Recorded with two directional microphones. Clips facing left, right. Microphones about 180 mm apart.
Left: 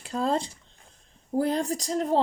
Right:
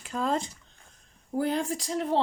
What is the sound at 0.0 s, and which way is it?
Speech, 35° left (ahead or behind).